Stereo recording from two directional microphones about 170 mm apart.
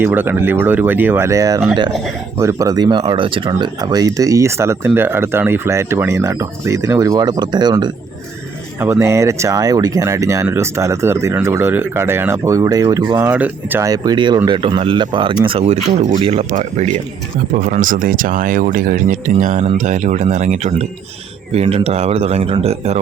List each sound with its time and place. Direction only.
0.0 s speech: 10° right (ahead or behind)
8.8 s speech: 15° right (ahead or behind)
13.2 s speech: 10° right (ahead or behind)
13.8 s speech: 20° right (ahead or behind)